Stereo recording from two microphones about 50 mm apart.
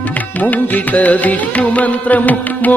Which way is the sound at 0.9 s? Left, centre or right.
Left.